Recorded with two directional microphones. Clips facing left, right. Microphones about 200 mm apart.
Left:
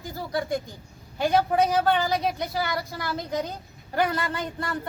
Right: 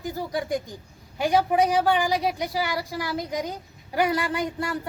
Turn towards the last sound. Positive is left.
turn(degrees=-10)  # may be behind; listen again after turning